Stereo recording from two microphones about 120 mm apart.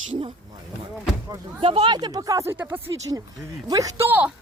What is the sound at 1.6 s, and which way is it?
Speech, 50° right (ahead or behind).